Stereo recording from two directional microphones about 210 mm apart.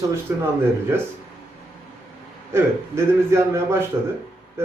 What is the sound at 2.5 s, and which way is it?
A man's voice, 10° right (ahead or behind).